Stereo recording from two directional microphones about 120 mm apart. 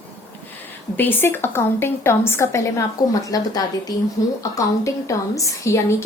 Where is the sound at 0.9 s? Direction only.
15° left (ahead or behind).